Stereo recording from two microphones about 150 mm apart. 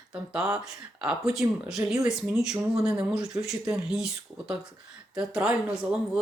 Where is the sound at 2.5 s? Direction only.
20° right (ahead or behind).